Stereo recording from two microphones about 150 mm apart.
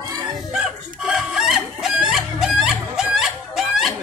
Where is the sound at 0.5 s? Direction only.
Centre (ahead or behind).